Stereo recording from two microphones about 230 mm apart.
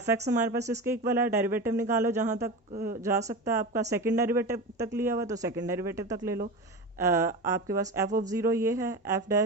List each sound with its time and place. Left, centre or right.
0.0 s speech: centre